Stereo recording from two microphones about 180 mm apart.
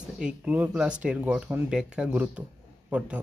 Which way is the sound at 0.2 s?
5° right (ahead or behind).